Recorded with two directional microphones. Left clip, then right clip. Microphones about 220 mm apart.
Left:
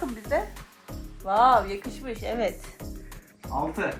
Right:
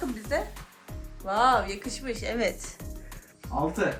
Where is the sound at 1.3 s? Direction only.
15° left (ahead or behind).